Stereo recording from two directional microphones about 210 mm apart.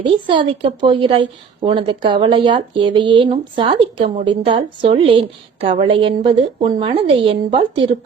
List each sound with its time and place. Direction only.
0.0 s a woman's voice: 20° right (ahead or behind)